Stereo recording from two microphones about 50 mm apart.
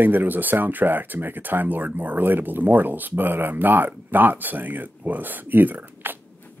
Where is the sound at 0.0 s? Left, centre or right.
Right.